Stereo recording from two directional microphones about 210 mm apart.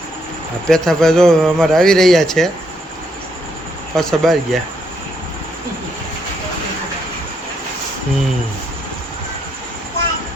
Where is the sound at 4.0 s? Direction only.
Centre (ahead or behind).